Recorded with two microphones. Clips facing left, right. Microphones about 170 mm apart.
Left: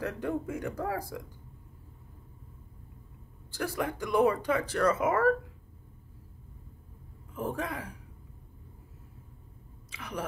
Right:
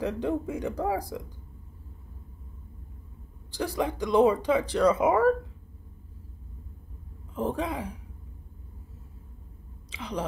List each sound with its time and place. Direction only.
0.0 s speech: 15° right (ahead or behind)
3.5 s speech: 15° right (ahead or behind)
7.3 s speech: 20° right (ahead or behind)
9.8 s speech: 15° right (ahead or behind)